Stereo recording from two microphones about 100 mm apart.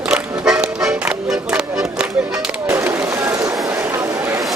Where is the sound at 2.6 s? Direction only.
25° right (ahead or behind).